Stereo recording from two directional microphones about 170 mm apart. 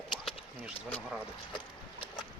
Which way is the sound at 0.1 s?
Centre (ahead or behind).